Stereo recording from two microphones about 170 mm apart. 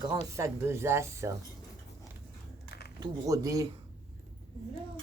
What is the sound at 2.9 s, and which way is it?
Speech, 20° right (ahead or behind).